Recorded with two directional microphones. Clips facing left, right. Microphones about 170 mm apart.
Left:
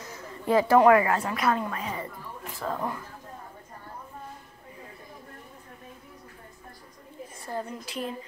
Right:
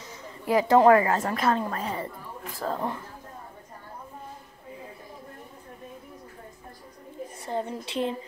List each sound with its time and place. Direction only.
0.0 s a sound: 10° right (ahead or behind)
0.7 s a woman's voice: 30° right (ahead or behind)
7.4 s a woman's voice: 25° right (ahead or behind)